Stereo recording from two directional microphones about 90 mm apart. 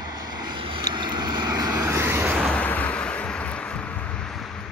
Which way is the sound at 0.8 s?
50° right (ahead or behind).